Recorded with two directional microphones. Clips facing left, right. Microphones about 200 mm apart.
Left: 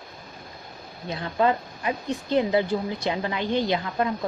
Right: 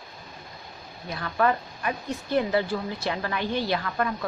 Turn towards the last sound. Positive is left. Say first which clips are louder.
# left 2 dB
turn(degrees=20)  # may be behind; listen again after turning